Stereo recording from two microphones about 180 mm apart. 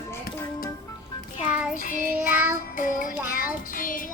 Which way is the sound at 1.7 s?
45° left (ahead or behind).